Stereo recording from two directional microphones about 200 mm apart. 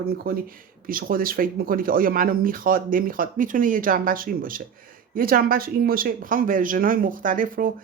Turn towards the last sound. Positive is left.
turn(degrees=-45)  # may be behind; listen again after turning